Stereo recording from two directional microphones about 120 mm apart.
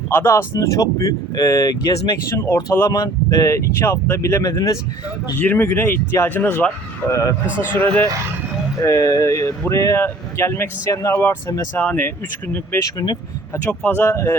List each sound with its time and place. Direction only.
0.1 s speech: 20° left (ahead or behind)
5.4 s speech: 15° left (ahead or behind)
7.1 s speech: 25° left (ahead or behind)
8.8 s speech: 30° left (ahead or behind)
12.8 s speech: 30° left (ahead or behind)
13.7 s speech: 15° left (ahead or behind)